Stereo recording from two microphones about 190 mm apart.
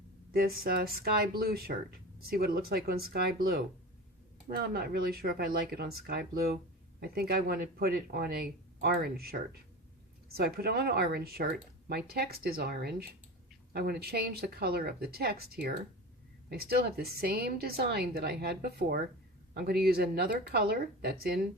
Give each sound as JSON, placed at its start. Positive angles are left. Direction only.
{"t": 0.3, "sound": "speech", "side_deg": -50}